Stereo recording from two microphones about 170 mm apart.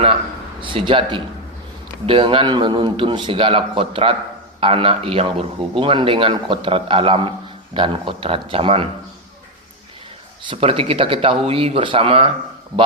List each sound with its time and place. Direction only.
0.6 s a man's voice: 30° right (ahead or behind)
10.4 s a man's voice: 30° right (ahead or behind)